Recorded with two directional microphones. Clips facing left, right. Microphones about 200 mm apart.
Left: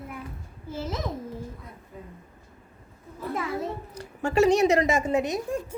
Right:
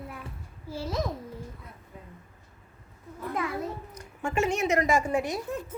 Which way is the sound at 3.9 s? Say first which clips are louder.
Left 5 dB; 35° left (ahead or behind).